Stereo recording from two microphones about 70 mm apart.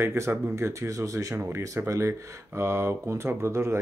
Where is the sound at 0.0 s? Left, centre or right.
Right.